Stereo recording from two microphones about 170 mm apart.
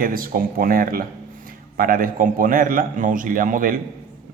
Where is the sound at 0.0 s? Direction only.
60° right (ahead or behind).